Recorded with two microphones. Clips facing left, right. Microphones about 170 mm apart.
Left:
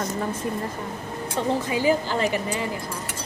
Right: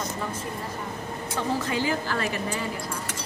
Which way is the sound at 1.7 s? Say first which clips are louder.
Left 5 dB; 15° left (ahead or behind).